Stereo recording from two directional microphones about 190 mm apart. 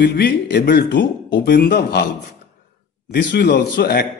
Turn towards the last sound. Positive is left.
turn(degrees=60)  # may be behind; listen again after turning